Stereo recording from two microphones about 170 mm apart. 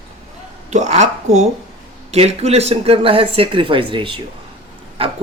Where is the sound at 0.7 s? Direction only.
45° right (ahead or behind).